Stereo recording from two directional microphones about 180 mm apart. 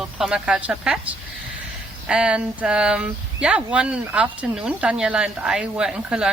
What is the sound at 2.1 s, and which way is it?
A woman's voice, 5° right (ahead or behind).